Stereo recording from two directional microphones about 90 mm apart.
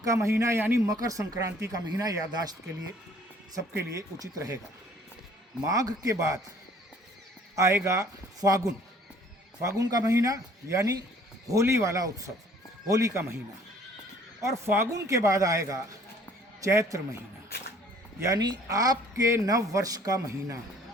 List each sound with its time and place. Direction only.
0.0 s speech: 35° right (ahead or behind)
0.9 s speech: 40° right (ahead or behind)
3.8 s speech: 35° right (ahead or behind)
5.7 s speech: 40° right (ahead or behind)
7.5 s a man's voice: 35° right (ahead or behind)
14.4 s speech: 30° right (ahead or behind)
18.3 s speech: 55° right (ahead or behind)
18.7 s speech: 40° right (ahead or behind)